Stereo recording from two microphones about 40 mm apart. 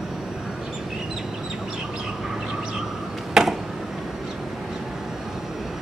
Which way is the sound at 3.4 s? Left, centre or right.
Centre.